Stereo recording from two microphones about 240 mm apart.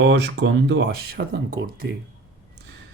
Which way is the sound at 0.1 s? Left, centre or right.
Right.